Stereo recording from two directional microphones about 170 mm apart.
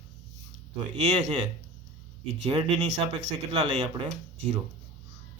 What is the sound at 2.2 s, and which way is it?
A man's voice, 40° right (ahead or behind).